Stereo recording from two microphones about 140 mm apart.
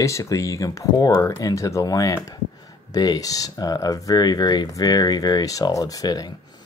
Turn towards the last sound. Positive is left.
turn(degrees=25)  # may be behind; listen again after turning